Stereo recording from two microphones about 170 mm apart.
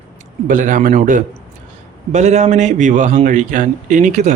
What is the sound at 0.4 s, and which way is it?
A man's voice, 50° right (ahead or behind).